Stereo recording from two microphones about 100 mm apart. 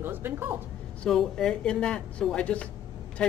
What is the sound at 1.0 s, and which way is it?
A man's voice, 5° left (ahead or behind).